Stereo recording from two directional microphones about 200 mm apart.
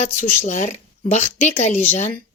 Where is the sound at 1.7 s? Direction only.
10° left (ahead or behind).